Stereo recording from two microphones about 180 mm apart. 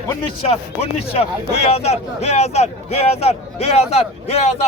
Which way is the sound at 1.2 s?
35° left (ahead or behind).